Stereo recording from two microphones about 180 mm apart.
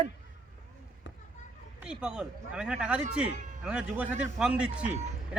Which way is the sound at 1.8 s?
5° right (ahead or behind).